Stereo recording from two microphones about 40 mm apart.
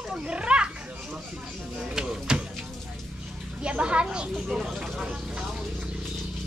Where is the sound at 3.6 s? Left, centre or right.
Right.